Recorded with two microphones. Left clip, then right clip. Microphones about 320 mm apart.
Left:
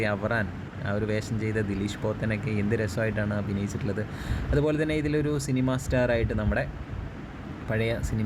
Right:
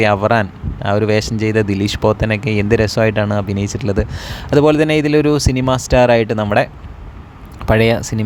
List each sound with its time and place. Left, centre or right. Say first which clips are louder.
0.0 s speech: right 14 dB; right
7.7 s speech: right 16 dB; right